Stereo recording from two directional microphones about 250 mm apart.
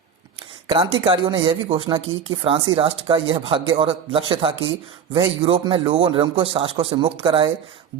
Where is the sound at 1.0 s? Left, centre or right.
Right.